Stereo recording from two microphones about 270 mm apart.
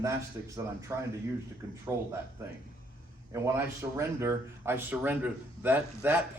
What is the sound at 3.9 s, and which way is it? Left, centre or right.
Speech, centre.